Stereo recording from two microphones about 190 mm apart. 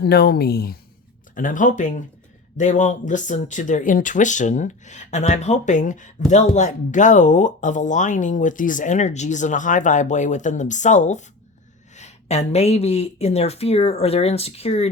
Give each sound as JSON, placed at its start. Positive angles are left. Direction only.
{"t": 0.0, "sound": "speech", "side_deg": 55}
{"t": 1.4, "sound": "speech", "side_deg": 45}